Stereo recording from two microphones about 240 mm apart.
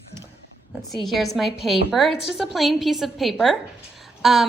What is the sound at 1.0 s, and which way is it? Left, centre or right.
A woman's voice, centre.